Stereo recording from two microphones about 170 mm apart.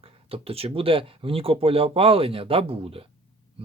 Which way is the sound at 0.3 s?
35° right (ahead or behind).